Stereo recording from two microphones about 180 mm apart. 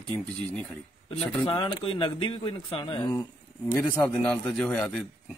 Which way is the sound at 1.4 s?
25° left (ahead or behind).